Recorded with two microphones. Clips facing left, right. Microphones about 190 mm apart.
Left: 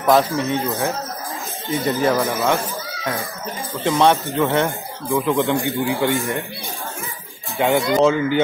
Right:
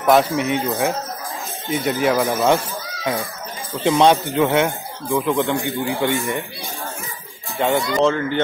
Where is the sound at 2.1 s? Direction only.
15° right (ahead or behind).